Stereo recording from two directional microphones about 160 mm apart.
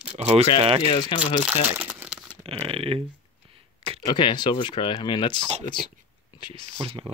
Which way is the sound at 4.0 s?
30° left (ahead or behind).